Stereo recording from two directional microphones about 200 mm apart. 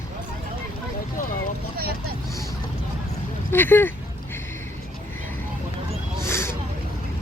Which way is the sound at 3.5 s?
10° left (ahead or behind).